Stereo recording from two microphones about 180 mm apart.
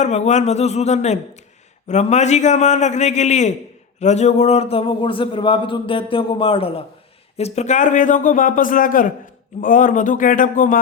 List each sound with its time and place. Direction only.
0.0 s a man's voice: 40° left (ahead or behind)